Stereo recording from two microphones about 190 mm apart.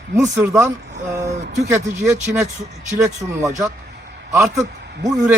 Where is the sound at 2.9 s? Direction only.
15° right (ahead or behind).